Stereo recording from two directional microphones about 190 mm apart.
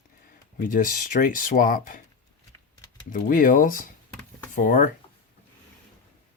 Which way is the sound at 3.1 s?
45° left (ahead or behind).